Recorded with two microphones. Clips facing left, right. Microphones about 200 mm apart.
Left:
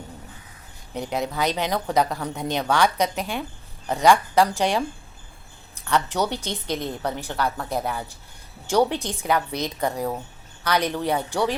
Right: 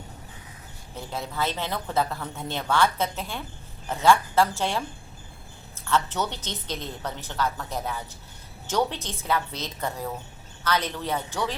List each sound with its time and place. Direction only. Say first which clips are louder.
0.9 s a woman's voice: left 5 dB; 15° left (ahead or behind)
2.0 s speech: left 5 dB; 40° left (ahead or behind)
2.3 s a woman's voice: left 3 dB; 15° left (ahead or behind)
5.7 s a sound: left 2 dB; 15° left (ahead or behind)
6.3 s a woman's voice: left 6 dB; 10° left (ahead or behind)